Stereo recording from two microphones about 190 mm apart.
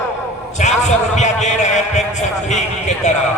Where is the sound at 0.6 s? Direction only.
40° left (ahead or behind).